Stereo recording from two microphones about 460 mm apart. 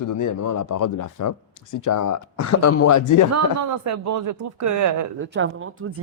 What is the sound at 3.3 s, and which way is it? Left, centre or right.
Speech, right.